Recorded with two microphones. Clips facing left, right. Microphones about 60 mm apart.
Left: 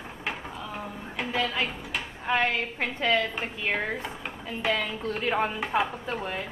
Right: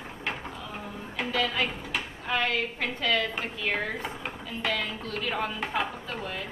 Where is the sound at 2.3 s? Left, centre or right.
Left.